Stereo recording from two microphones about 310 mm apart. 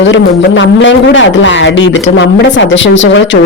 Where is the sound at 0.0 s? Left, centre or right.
Left.